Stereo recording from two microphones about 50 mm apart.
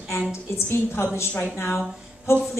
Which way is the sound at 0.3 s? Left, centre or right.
Left.